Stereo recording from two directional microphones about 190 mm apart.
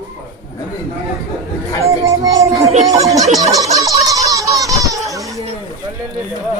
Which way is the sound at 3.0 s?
35° right (ahead or behind).